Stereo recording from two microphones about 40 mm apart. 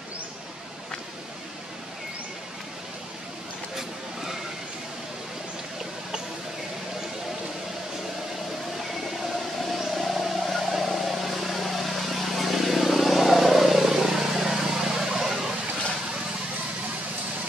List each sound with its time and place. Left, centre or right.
9.6 s vehicle: centre